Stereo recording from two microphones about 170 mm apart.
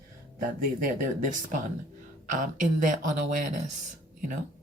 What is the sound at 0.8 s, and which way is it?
Speech, 55° right (ahead or behind).